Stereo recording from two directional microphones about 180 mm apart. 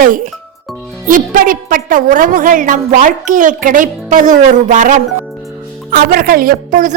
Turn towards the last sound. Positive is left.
turn(degrees=-50)  # may be behind; listen again after turning